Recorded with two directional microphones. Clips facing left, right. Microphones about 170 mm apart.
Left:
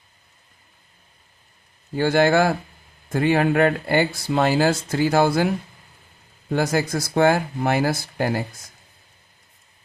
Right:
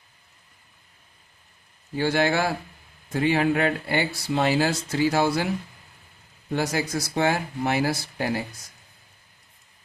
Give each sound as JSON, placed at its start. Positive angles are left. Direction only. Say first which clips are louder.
{"t": 2.0, "sound": "speech", "louder": "left 5 dB", "side_deg": 50}
{"t": 6.5, "sound": "speech", "louder": "left 4 dB", "side_deg": 50}